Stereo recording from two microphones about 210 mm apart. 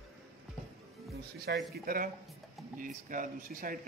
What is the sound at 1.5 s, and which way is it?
A man's voice, 50° right (ahead or behind).